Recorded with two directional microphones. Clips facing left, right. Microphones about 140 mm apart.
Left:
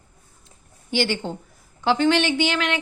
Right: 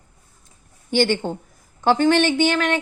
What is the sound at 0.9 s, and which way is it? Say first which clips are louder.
A woman's voice: right 4 dB; 50° right (ahead or behind).